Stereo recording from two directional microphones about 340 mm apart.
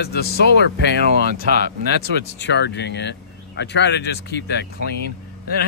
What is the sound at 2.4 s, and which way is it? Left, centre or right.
Speech, left.